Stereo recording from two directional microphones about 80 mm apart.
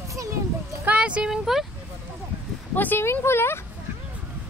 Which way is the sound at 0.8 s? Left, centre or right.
Centre.